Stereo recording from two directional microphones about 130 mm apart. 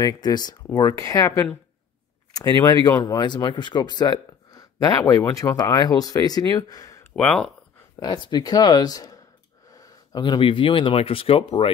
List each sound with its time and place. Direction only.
0.0 s speech: 30° left (ahead or behind)
7.2 s speech: 5° left (ahead or behind)
7.9 s speech: 35° left (ahead or behind)